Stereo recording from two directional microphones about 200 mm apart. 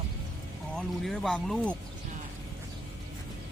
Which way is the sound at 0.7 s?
Centre (ahead or behind).